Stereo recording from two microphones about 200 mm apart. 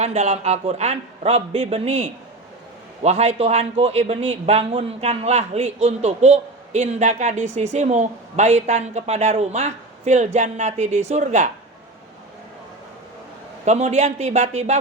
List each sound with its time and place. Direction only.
0.0 s a man's voice: 35° right (ahead or behind)
13.7 s a man's voice: 35° right (ahead or behind)